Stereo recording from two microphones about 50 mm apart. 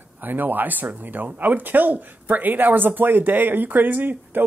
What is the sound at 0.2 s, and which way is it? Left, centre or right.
Speech, right.